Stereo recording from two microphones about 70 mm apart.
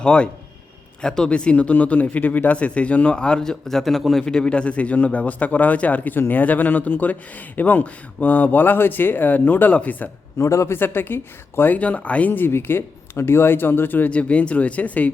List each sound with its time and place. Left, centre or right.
0.0 s a man's voice: centre
10.3 s speech: left
10.8 s speech: left